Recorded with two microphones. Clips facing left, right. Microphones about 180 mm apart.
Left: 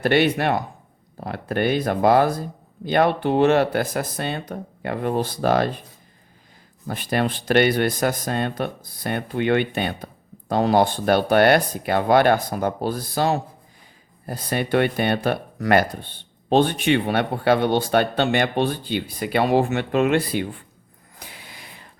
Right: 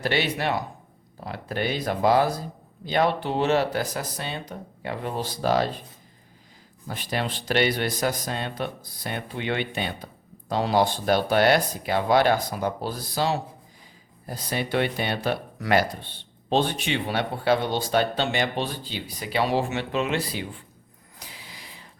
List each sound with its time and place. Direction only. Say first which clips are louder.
0.0 s speech: left 7 dB; 55° left (ahead or behind)
6.8 s speech: left 6 dB; 55° left (ahead or behind)
21.2 s a sound: left 2 dB; 55° left (ahead or behind)